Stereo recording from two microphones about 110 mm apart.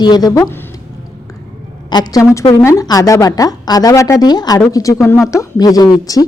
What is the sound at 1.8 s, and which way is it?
Speech, 40° left (ahead or behind).